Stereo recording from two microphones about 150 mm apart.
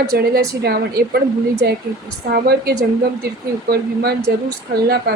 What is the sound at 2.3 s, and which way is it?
Speech, 90° right.